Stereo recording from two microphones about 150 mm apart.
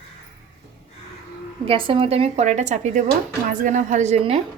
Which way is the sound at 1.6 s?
35° right (ahead or behind).